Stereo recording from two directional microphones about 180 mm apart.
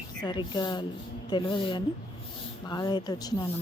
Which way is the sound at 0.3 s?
25° left (ahead or behind).